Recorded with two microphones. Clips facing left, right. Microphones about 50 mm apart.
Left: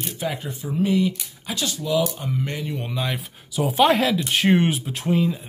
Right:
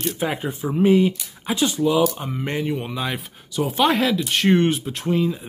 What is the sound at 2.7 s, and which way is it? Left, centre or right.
Speech, centre.